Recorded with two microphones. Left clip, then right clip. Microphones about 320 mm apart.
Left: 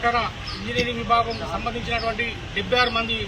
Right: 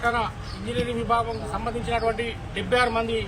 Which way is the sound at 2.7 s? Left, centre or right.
Right.